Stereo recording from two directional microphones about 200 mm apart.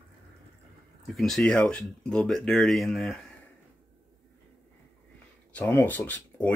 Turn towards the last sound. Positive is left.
turn(degrees=10)  # may be behind; listen again after turning